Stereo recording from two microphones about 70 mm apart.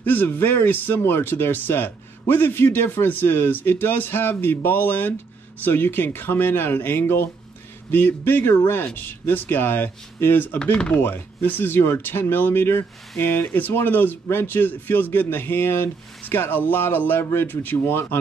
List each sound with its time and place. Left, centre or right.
0.0 s speech: left